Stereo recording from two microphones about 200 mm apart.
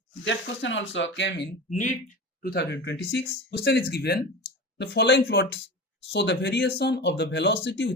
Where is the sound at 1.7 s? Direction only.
40° left (ahead or behind).